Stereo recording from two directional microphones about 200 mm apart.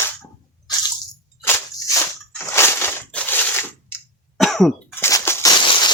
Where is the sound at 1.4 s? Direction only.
10° left (ahead or behind).